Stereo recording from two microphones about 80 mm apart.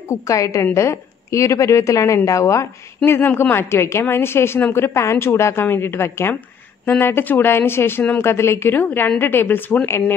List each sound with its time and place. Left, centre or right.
0.1 s a woman's voice: left
3.1 s a woman's voice: left